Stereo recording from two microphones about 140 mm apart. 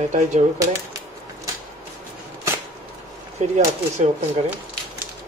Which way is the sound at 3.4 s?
55° right (ahead or behind).